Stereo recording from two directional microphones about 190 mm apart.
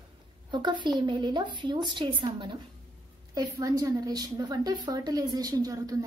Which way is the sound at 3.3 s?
20° right (ahead or behind).